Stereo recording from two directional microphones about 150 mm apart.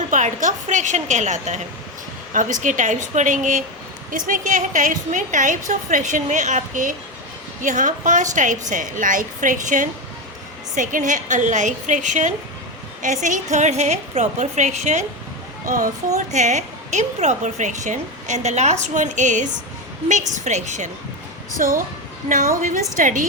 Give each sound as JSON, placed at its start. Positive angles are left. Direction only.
{"t": 0.1, "sound": "a woman's voice", "side_deg": -55}
{"t": 15.6, "sound": "a woman's voice", "side_deg": -65}
{"t": 16.1, "sound": "a woman's voice", "side_deg": -50}
{"t": 21.6, "sound": "a woman's voice", "side_deg": -65}